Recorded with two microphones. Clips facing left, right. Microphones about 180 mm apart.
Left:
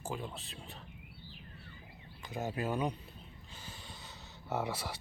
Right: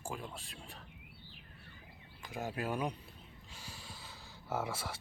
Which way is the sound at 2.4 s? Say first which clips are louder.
Left 2 dB; 5° right (ahead or behind).